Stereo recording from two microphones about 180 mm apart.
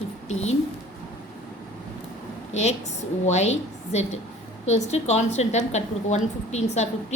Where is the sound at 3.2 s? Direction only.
40° left (ahead or behind).